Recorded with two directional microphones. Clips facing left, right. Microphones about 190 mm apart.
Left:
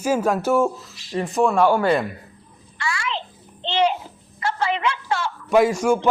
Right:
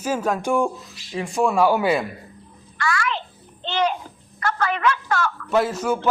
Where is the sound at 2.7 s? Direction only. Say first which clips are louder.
Right 3 dB; 25° left (ahead or behind).